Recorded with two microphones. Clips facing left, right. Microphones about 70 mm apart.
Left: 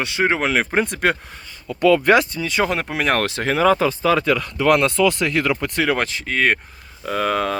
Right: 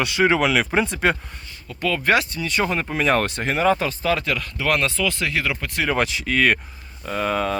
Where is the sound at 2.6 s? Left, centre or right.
Left.